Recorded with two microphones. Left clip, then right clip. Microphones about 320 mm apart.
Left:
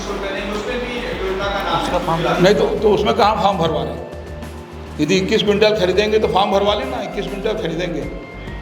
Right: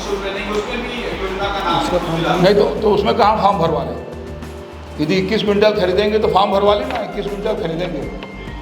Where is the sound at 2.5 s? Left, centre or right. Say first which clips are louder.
Right 1 dB; centre.